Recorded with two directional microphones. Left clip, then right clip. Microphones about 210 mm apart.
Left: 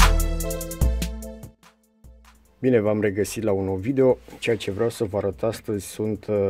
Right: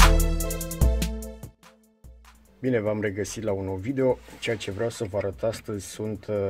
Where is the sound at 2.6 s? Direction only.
45° left (ahead or behind).